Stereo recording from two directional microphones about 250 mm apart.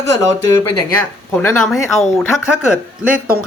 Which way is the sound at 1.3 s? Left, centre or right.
Centre.